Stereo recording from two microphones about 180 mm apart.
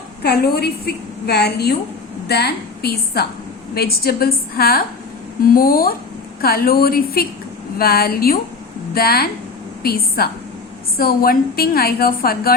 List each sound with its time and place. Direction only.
0.2 s a woman's voice: 60° left (ahead or behind)